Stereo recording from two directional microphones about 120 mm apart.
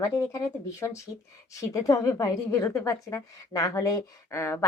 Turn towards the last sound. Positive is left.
turn(degrees=25)  # may be behind; listen again after turning